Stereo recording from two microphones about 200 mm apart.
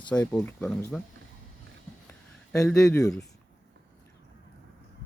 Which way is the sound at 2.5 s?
15° left (ahead or behind).